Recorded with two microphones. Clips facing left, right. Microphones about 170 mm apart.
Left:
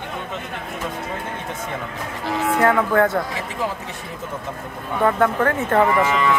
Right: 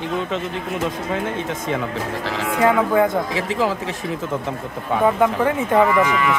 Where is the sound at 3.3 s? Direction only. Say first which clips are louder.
Right 5 dB; 90° right.